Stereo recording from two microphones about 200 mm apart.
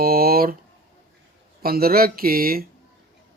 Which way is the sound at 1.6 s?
50° right (ahead or behind).